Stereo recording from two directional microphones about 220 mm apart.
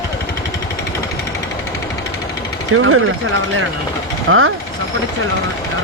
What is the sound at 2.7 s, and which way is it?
Speech, 70° right (ahead or behind).